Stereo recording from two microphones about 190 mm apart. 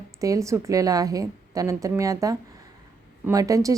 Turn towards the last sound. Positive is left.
turn(degrees=-15)  # may be behind; listen again after turning